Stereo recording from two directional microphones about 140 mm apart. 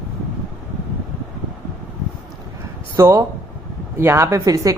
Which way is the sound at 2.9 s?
20° right (ahead or behind).